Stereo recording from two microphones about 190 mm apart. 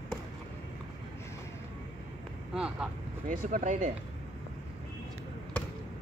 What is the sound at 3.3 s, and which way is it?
Speech, 40° right (ahead or behind).